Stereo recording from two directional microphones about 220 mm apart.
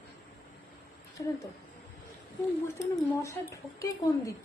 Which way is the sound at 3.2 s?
15° left (ahead or behind).